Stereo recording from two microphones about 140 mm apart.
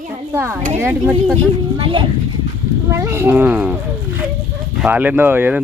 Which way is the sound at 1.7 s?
35° right (ahead or behind).